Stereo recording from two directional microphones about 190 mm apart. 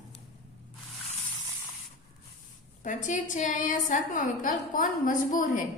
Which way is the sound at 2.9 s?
40° left (ahead or behind).